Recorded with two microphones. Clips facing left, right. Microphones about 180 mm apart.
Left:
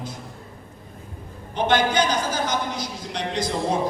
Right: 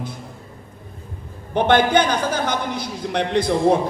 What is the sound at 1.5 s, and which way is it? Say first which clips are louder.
A man's voice: right 5 dB; 60° right (ahead or behind).